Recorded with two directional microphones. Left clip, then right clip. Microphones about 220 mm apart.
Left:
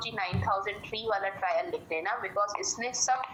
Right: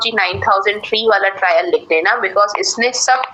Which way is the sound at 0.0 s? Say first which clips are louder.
Right 17 dB; 45° right (ahead or behind).